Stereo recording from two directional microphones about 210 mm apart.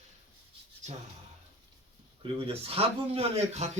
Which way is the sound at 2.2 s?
25° right (ahead or behind).